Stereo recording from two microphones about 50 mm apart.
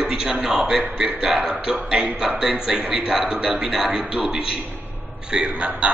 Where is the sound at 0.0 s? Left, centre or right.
Centre.